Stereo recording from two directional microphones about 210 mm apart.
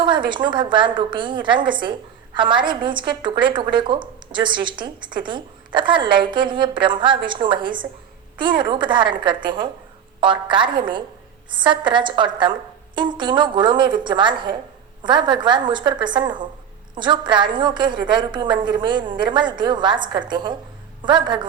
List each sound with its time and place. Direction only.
0.0 s a woman's voice: 20° right (ahead or behind)